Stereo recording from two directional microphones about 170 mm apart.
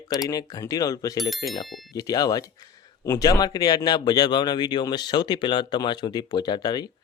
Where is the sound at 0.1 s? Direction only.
20° left (ahead or behind).